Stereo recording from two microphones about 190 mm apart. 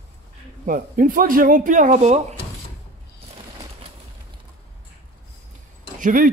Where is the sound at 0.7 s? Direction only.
45° right (ahead or behind).